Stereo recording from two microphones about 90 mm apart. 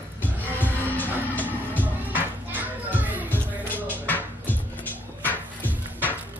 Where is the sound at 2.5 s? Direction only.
20° right (ahead or behind).